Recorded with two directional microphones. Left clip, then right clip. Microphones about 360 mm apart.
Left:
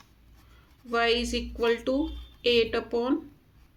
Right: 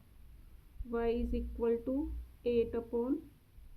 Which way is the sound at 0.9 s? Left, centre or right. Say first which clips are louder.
Left 10 dB; centre.